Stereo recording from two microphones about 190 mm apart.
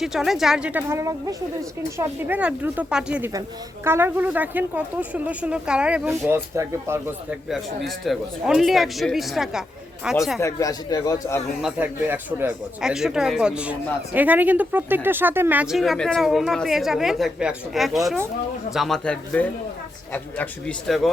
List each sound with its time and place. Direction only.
0.0 s speech: centre (ahead or behind)
7.9 s speech: centre (ahead or behind)
10.4 s speech: 20° left (ahead or behind)
11.6 s speech: 10° right (ahead or behind)